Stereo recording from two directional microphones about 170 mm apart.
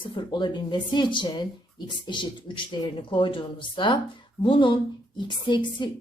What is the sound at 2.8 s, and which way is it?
A woman's voice, 30° left (ahead or behind).